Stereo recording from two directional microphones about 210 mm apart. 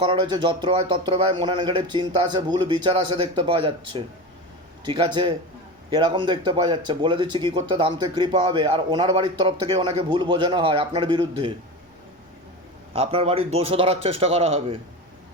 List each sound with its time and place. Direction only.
0.1 s speech: 20° right (ahead or behind)
12.9 s speech: 30° right (ahead or behind)